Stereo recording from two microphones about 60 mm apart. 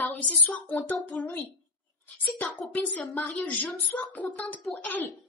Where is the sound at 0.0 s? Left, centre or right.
Left.